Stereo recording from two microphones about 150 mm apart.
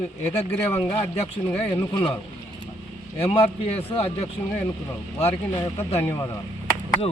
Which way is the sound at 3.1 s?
40° left (ahead or behind).